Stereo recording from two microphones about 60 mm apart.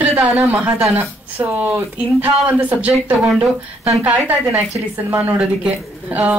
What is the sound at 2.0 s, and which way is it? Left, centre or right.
A woman's voice, right.